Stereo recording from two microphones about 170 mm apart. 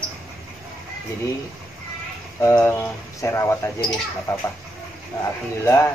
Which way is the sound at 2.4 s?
15° left (ahead or behind).